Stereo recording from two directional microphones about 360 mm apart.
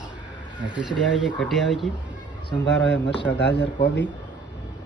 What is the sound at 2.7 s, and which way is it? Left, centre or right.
Speech, left.